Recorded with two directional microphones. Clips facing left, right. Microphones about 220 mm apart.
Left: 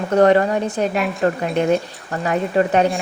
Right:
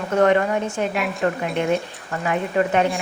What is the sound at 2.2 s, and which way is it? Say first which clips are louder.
Speech: left 3 dB; 40° left (ahead or behind).